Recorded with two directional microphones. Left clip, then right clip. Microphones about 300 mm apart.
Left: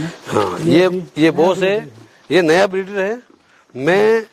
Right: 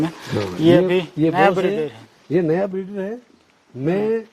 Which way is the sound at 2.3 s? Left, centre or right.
Centre.